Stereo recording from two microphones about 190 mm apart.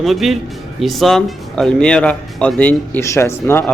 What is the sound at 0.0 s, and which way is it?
Speech, centre (ahead or behind).